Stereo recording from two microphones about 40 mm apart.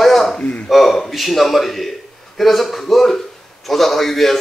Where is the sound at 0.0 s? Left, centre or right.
Centre.